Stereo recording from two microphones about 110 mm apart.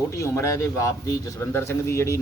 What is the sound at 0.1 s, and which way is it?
Speech, 25° left (ahead or behind).